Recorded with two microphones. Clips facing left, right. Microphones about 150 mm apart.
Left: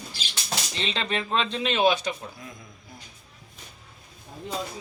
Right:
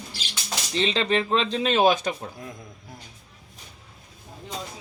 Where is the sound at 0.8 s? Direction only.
35° right (ahead or behind).